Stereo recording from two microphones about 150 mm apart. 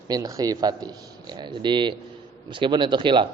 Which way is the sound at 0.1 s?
25° right (ahead or behind).